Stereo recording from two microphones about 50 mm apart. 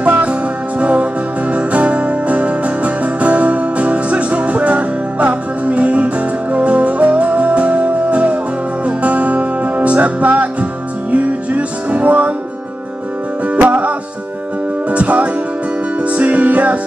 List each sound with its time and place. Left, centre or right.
0.0 s music: right
13.6 s music: right